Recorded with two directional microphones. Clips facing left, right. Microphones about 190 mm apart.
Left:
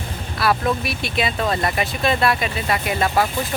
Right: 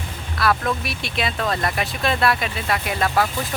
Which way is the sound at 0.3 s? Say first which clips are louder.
Left 2 dB; 5° left (ahead or behind).